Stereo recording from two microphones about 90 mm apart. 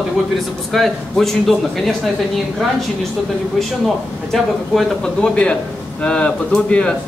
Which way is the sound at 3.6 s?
Centre (ahead or behind).